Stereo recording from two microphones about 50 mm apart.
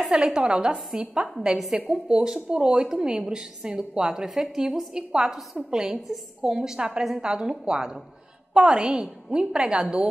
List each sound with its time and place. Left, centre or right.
0.1 s a woman's voice: centre